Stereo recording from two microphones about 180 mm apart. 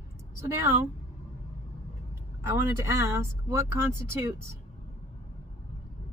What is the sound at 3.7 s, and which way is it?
Speech, 15° right (ahead or behind).